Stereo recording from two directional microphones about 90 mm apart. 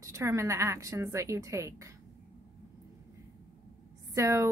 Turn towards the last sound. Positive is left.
turn(degrees=-35)  # may be behind; listen again after turning